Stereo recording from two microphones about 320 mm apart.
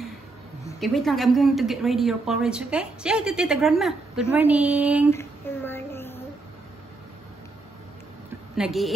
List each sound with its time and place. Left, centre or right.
0.7 s a woman's voice: centre
5.1 s a sound: centre
8.5 s a woman's voice: centre